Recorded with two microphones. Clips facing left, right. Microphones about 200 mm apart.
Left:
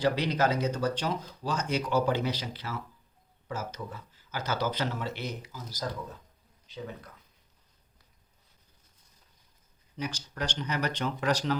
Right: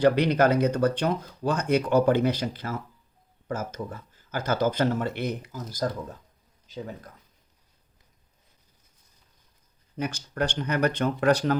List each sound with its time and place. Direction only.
0.0 s speech: 60° right (ahead or behind); by 7.1 s 45° right (ahead or behind)
10.0 s speech: 55° right (ahead or behind)